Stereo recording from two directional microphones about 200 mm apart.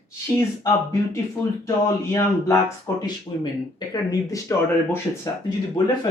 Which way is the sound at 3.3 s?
25° left (ahead or behind).